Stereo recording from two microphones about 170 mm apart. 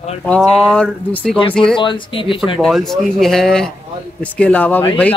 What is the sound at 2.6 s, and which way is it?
Speech, centre (ahead or behind).